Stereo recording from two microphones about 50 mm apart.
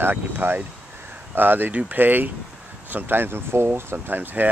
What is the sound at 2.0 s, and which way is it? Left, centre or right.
Speech, right.